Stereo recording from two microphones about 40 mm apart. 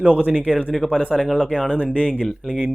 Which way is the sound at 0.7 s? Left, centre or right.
Centre.